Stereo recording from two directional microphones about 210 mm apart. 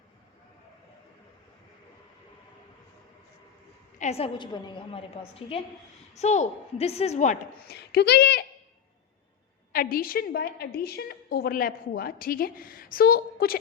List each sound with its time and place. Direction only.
3.9 s a woman's voice: 30° left (ahead or behind); by 8.4 s 50° left (ahead or behind)
9.7 s a woman's voice: 45° left (ahead or behind)